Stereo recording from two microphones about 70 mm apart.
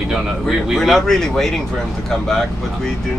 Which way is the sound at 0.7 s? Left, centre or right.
Centre.